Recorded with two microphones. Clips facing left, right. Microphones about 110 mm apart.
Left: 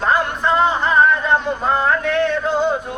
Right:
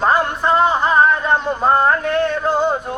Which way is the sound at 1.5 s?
40° right (ahead or behind).